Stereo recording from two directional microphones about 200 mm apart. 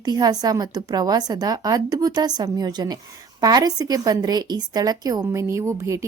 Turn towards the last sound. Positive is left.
turn(degrees=-15)  # may be behind; listen again after turning